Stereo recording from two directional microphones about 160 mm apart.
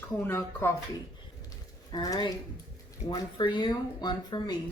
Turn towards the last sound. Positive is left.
turn(degrees=25)  # may be behind; listen again after turning